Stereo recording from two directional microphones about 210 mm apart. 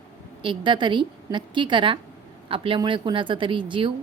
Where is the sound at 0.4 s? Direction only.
25° right (ahead or behind).